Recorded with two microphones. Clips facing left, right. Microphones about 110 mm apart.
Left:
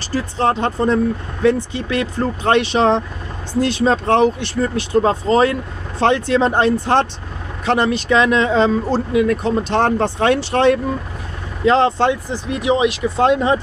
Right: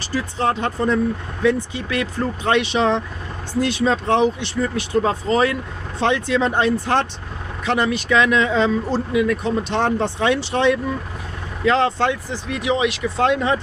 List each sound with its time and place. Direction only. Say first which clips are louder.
0.1 s speech: left 3 dB; 30° left (ahead or behind)
4.7 s speech: left 5 dB; 30° left (ahead or behind); by 10.8 s 45° left (ahead or behind)
11.6 s speech: left 4 dB; 25° left (ahead or behind)